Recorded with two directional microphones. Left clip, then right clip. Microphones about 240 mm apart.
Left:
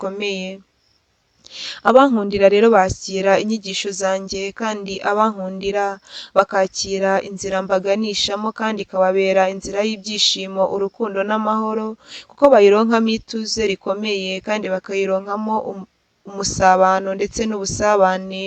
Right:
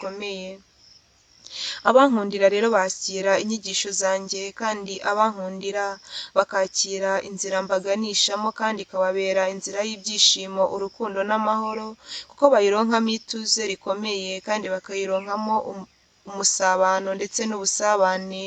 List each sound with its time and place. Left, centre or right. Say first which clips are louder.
0.0 s speech: left 7 dB; left
1.5 s speech: left 4 dB; left